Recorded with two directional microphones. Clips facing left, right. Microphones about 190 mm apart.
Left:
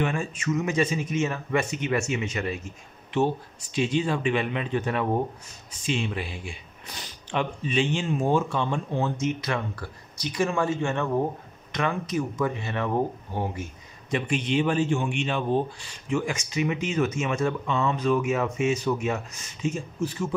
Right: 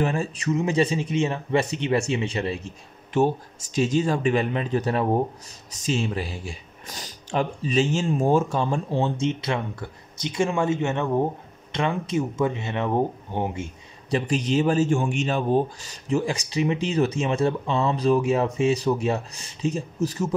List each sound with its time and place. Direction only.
0.0 s a man's voice: 35° right (ahead or behind)
3.1 s a man's voice: 45° right (ahead or behind); by 13.7 s 25° right (ahead or behind)
14.1 s a man's voice: 35° right (ahead or behind)